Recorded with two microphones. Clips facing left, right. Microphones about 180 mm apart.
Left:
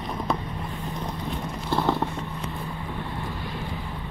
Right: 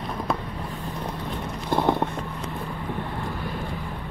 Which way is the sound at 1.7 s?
15° right (ahead or behind).